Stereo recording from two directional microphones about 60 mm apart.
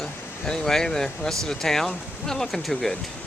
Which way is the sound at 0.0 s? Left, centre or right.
Centre.